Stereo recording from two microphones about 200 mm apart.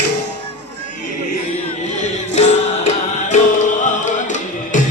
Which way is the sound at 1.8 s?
35° left (ahead or behind).